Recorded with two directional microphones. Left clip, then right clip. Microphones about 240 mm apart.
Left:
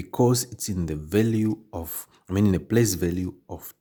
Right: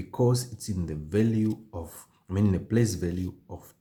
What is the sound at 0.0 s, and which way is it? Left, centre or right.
Speech, left.